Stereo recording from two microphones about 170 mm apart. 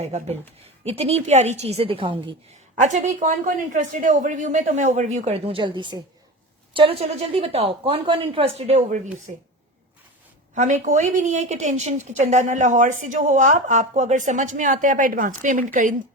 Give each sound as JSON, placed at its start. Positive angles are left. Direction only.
{"t": 0.0, "sound": "a woman's voice", "side_deg": -40}
{"t": 2.8, "sound": "a woman's voice", "side_deg": -45}
{"t": 10.5, "sound": "a woman's voice", "side_deg": -45}